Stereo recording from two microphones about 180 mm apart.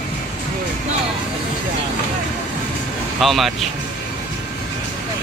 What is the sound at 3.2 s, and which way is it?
Speech, centre (ahead or behind).